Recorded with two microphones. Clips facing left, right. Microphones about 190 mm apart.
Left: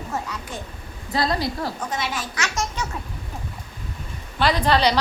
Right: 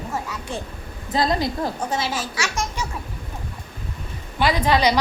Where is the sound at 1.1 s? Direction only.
20° right (ahead or behind).